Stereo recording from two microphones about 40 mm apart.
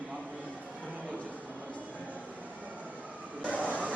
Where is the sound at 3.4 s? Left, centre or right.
Right.